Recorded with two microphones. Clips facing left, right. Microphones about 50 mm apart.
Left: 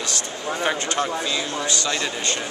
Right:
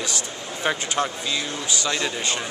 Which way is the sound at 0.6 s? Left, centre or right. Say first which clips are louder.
Even; centre.